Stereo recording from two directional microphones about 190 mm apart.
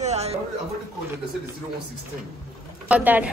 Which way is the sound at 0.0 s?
35° right (ahead or behind).